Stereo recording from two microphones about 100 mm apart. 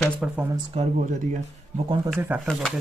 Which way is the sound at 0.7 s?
90° right.